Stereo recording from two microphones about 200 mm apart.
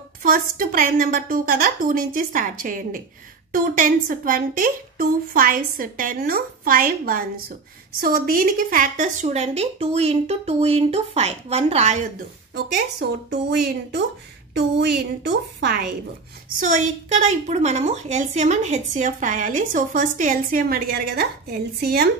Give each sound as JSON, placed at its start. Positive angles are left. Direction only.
{"t": 0.2, "sound": "a woman's voice", "side_deg": -45}
{"t": 13.3, "sound": "a woman's voice", "side_deg": -55}
{"t": 16.5, "sound": "a woman's voice", "side_deg": -40}